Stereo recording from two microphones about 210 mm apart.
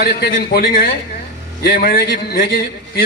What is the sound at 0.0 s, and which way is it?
A man's voice, 45° left (ahead or behind).